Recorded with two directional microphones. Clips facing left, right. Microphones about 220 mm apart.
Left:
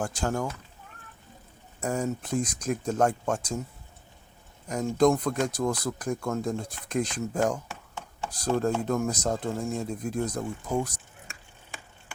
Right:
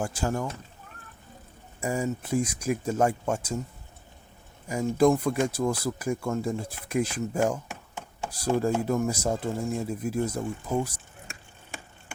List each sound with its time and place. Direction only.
0.0 s speech: 5° right (ahead or behind)
1.8 s speech: 5° right (ahead or behind)
4.7 s speech: 10° right (ahead or behind)